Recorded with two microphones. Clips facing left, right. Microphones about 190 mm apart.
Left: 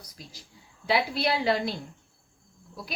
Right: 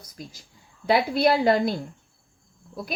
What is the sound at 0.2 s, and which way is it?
Speech, 50° right (ahead or behind).